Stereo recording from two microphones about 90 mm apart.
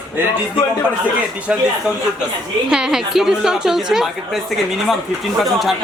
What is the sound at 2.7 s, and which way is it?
A woman's voice, 5° right (ahead or behind).